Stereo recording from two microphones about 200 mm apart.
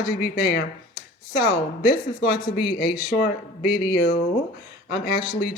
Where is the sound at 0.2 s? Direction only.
55° left (ahead or behind).